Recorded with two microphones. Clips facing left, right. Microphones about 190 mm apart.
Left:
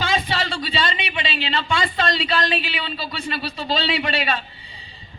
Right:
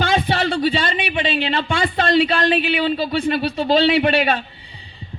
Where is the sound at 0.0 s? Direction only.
55° right (ahead or behind).